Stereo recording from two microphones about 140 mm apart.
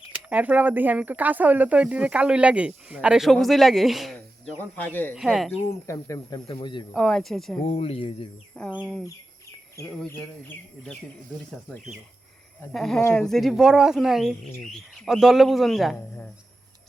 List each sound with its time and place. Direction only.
0.1 s speech: 10° right (ahead or behind)
5.8 s speech: 20° left (ahead or behind)
6.5 s speech: 35° left (ahead or behind)
6.9 s speech: 5° left (ahead or behind)
7.6 s speech: 45° left (ahead or behind)
8.5 s speech: 10° left (ahead or behind)
10.1 s speech: 15° left (ahead or behind)
12.7 s speech: centre (ahead or behind)
16.0 s speech: 15° left (ahead or behind)